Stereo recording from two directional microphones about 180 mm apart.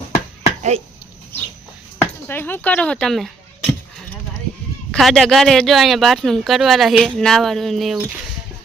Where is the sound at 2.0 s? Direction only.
10° left (ahead or behind).